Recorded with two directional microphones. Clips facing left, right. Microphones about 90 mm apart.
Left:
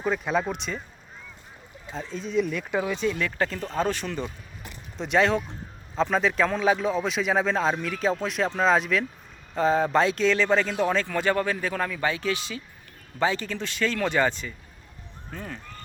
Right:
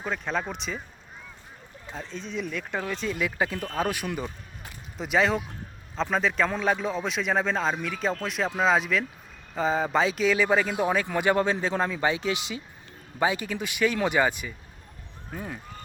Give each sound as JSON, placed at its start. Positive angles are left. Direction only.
{"t": 0.0, "sound": "a man's voice", "side_deg": 5}
{"t": 1.9, "sound": "a man's voice", "side_deg": 0}